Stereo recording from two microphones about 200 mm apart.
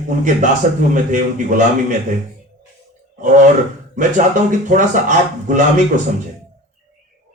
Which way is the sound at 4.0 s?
40° right (ahead or behind).